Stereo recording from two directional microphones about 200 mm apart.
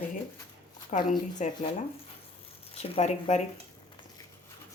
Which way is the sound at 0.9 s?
40° left (ahead or behind).